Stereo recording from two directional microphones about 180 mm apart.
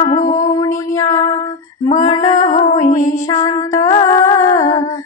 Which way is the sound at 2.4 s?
45° left (ahead or behind).